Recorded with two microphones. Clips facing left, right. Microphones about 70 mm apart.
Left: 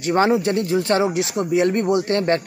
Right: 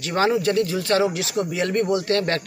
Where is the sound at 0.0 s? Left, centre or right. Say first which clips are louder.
Left 3 dB; left.